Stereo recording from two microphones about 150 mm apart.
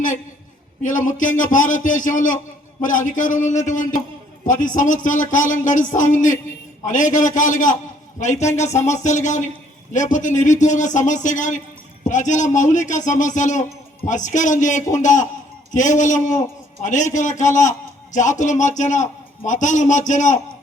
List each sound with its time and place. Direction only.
0.8 s a man's voice: 60° left (ahead or behind)